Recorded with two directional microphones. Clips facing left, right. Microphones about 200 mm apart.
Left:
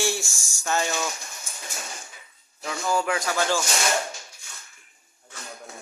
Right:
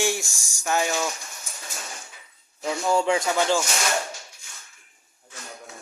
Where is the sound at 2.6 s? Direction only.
25° right (ahead or behind).